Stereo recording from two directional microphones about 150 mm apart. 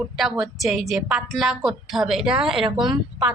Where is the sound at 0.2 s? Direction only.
Centre (ahead or behind).